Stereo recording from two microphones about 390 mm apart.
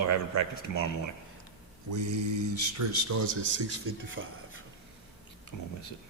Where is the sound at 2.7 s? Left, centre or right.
Right.